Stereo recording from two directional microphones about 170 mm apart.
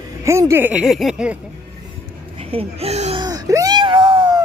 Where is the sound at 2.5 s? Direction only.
40° right (ahead or behind).